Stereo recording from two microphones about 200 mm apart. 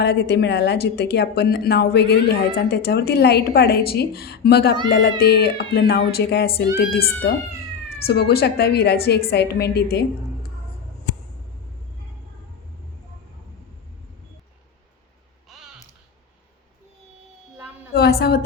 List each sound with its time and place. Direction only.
0.0 s a woman's voice: 55° left (ahead or behind)
15.4 s a sound: centre (ahead or behind)
17.9 s a woman's voice: 55° left (ahead or behind)